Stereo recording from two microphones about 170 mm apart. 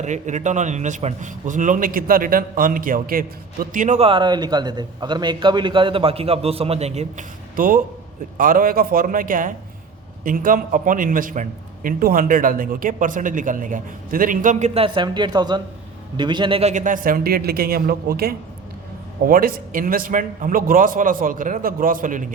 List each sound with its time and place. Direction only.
0.0 s a man's voice: 45° right (ahead or behind)
7.5 s a man's voice: 55° right (ahead or behind)